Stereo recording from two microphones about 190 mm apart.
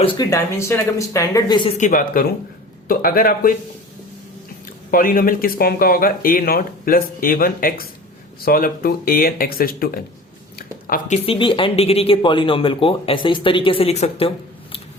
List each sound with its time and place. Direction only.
0.0 s speech: 25° left (ahead or behind)
1.8 s speech: 45° left (ahead or behind)
4.9 s speech: 50° left (ahead or behind)
10.6 s a sound: 50° left (ahead or behind)
11.3 s speech: 25° left (ahead or behind)